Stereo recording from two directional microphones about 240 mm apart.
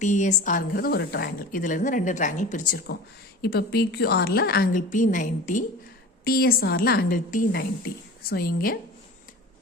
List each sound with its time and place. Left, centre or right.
0.0 s a woman's voice: left